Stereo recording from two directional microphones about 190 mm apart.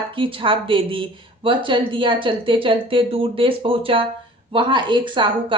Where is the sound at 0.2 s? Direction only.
25° right (ahead or behind).